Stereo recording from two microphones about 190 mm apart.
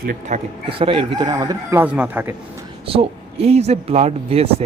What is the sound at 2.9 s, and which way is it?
Speech, 30° right (ahead or behind).